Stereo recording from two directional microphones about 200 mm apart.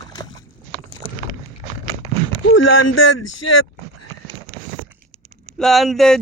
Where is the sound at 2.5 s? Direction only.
80° left.